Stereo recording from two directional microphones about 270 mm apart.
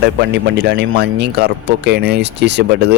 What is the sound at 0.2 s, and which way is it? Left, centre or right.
Speech, right.